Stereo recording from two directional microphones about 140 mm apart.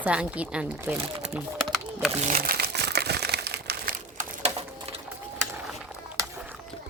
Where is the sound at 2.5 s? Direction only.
90° right.